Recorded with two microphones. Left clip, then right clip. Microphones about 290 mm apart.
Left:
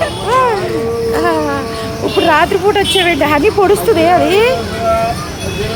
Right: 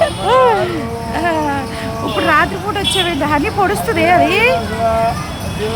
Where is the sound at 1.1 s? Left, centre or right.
Centre.